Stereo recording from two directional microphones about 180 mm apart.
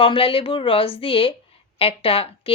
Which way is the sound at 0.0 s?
30° left (ahead or behind).